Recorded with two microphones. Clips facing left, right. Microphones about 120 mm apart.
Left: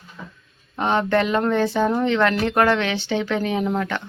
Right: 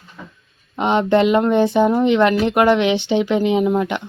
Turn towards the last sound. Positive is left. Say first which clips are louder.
# right 6 dB
turn(degrees=-15)  # may be behind; listen again after turning